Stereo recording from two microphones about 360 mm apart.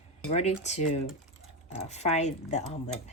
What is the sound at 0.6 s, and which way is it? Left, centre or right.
Speech, centre.